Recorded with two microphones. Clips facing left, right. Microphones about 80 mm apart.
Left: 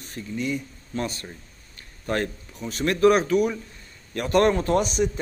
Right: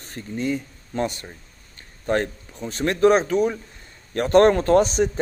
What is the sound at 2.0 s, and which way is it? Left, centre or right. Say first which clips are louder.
Speech: right 4 dB; right.